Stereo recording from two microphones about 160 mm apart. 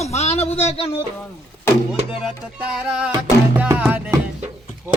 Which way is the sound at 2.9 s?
5° right (ahead or behind).